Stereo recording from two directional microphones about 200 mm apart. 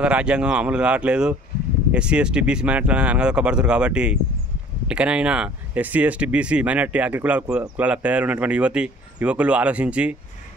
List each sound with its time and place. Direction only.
0.0 s speech: 5° right (ahead or behind)